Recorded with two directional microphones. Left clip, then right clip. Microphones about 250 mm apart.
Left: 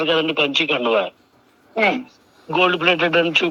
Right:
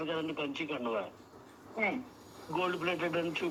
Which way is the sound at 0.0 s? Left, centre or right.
Left.